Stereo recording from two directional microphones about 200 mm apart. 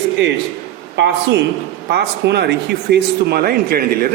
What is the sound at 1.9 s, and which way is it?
A man's voice, 55° right (ahead or behind).